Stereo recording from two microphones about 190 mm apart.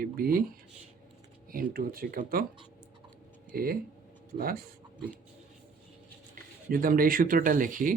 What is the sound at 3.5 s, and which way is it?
Speech, 50° right (ahead or behind).